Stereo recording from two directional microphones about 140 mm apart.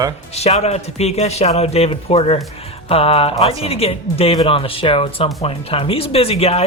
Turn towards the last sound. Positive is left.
turn(degrees=45)  # may be behind; listen again after turning